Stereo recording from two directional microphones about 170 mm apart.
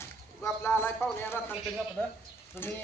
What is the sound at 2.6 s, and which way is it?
Speech, 15° left (ahead or behind).